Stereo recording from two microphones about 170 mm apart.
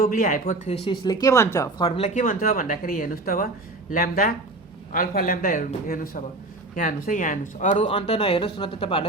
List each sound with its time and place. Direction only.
0.0 s speech: 55° left (ahead or behind)
0.7 s speech: 30° left (ahead or behind); by 1.7 s 15° left (ahead or behind)
1.8 s speech: 40° left (ahead or behind)